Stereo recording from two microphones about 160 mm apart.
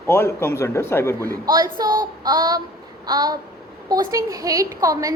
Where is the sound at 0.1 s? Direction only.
15° left (ahead or behind).